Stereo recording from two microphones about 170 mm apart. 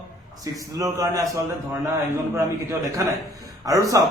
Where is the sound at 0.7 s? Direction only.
20° right (ahead or behind).